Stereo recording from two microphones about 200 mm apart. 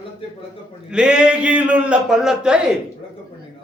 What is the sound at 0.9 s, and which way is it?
A man's voice, 5° right (ahead or behind).